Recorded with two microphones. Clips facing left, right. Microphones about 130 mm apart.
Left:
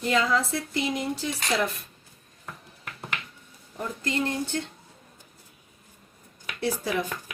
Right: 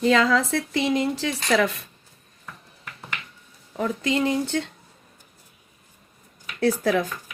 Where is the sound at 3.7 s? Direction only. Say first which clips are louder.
Right 6 dB; 90° right.